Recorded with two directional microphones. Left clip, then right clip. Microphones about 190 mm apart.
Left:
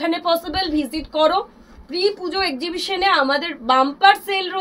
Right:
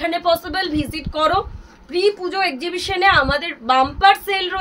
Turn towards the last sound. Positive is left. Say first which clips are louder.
# even
turn(degrees=-20)  # may be behind; listen again after turning